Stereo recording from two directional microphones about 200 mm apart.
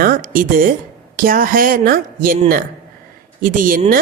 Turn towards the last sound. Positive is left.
turn(degrees=-45)  # may be behind; listen again after turning